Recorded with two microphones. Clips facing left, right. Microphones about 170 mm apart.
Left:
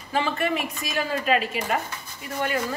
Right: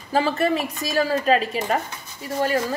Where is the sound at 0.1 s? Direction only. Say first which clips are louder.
Right 4 dB; 35° right (ahead or behind).